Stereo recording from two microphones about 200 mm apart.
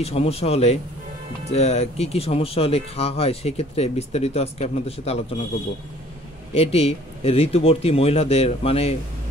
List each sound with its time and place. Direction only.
0.0 s speech: 30° left (ahead or behind)
6.5 s speech: 30° left (ahead or behind)